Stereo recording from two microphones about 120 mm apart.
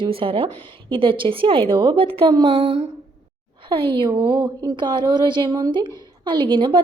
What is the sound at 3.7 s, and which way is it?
A woman's voice, 45° right (ahead or behind).